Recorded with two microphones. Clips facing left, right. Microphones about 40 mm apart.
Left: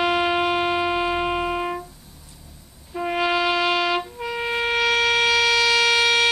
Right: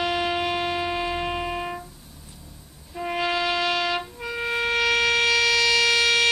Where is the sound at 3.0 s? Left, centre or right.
Centre.